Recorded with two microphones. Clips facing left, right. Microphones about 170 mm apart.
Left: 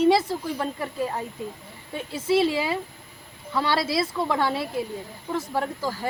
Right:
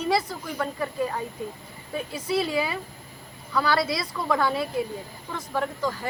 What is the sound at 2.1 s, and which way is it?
Speech, 25° left (ahead or behind).